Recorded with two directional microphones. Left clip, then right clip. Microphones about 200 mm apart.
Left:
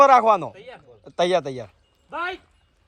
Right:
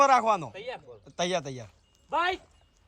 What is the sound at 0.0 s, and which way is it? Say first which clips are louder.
A man's voice: left 8 dB; 10° right (ahead or behind).